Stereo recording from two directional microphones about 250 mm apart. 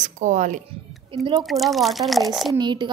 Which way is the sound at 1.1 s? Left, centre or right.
Centre.